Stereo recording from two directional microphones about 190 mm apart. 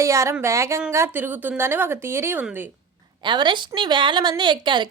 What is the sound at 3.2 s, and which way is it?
A woman's voice, 25° right (ahead or behind).